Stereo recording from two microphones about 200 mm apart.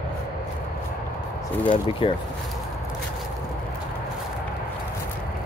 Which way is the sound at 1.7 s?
25° left (ahead or behind).